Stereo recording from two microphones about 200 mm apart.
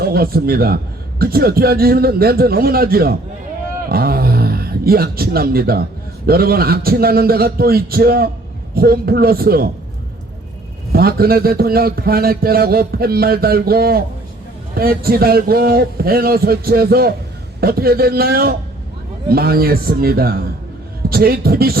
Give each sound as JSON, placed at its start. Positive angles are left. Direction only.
{"t": 0.0, "sound": "a man's voice", "side_deg": -50}
{"t": 10.9, "sound": "a man's voice", "side_deg": -50}